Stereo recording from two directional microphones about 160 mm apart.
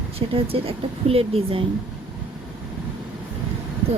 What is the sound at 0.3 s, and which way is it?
A woman's voice, 35° right (ahead or behind).